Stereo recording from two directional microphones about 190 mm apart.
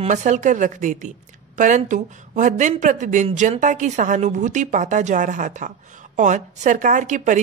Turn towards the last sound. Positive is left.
turn(degrees=-40)  # may be behind; listen again after turning